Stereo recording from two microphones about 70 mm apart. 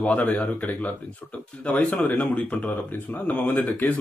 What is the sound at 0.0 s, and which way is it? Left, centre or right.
Speech, left.